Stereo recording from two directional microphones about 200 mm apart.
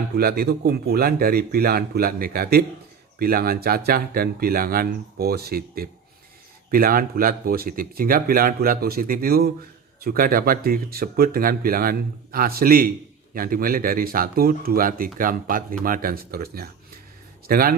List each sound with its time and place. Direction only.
0.2 s speech: 50° right (ahead or behind)